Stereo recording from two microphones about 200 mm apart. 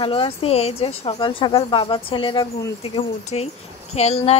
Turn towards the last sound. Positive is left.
turn(degrees=30)  # may be behind; listen again after turning